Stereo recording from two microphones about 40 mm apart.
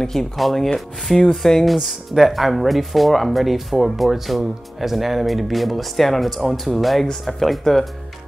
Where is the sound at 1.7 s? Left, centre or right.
Centre.